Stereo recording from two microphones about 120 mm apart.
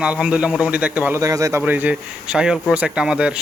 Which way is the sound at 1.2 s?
25° right (ahead or behind).